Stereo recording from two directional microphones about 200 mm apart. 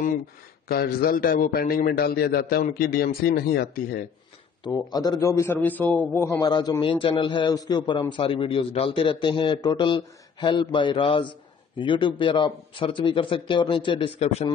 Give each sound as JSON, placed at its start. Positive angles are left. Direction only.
{"t": 0.7, "sound": "a man's voice", "side_deg": 50}
{"t": 4.6, "sound": "a man's voice", "side_deg": 20}